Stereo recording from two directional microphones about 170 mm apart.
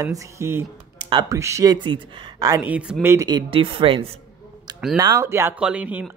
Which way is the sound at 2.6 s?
5° right (ahead or behind).